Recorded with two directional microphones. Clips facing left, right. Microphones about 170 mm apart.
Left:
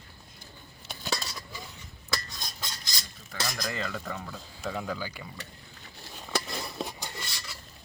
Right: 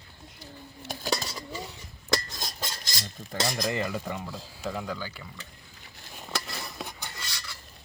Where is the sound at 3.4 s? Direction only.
30° right (ahead or behind); by 5.0 s centre (ahead or behind).